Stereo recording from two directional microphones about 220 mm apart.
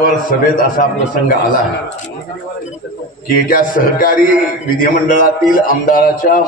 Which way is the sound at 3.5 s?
40° left (ahead or behind).